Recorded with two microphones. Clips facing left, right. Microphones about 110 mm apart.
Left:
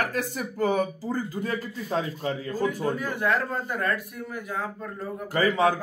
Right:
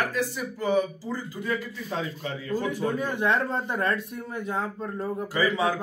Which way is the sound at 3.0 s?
20° right (ahead or behind).